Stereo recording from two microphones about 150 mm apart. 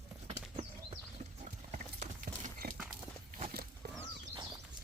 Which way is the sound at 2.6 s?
90° right.